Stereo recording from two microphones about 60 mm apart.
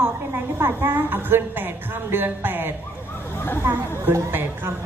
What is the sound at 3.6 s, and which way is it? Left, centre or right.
A woman's voice, right.